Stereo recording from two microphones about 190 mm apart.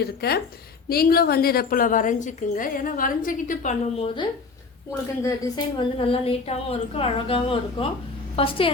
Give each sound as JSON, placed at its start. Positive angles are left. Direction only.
{"t": 0.0, "sound": "a woman's voice", "side_deg": 55}
{"t": 5.2, "sound": "a woman's voice", "side_deg": 25}